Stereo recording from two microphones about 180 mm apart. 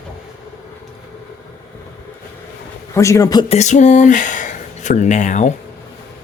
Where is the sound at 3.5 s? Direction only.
40° left (ahead or behind).